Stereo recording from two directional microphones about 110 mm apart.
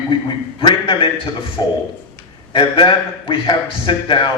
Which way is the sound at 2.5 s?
50° left (ahead or behind).